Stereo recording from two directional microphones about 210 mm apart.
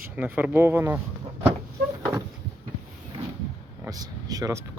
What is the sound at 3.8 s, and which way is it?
Speech, 15° right (ahead or behind).